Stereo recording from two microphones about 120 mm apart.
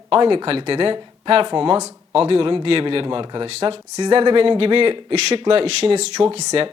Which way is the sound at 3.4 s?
55° right (ahead or behind).